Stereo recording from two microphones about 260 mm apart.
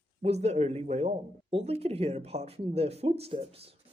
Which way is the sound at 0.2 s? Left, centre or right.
Right.